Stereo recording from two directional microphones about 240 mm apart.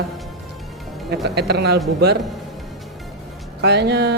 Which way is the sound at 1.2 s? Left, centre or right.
Right.